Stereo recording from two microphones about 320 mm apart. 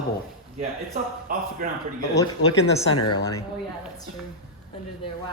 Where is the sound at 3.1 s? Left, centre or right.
Centre.